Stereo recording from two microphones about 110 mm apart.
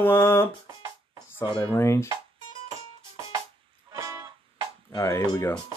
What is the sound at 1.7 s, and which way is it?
Music, 25° left (ahead or behind).